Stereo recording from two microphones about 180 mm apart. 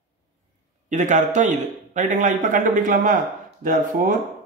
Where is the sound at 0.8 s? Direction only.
40° right (ahead or behind).